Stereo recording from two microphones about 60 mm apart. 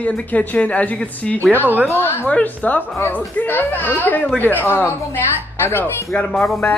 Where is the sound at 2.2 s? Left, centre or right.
Left.